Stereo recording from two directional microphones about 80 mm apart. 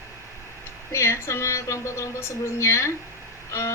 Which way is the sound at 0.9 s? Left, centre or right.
Left.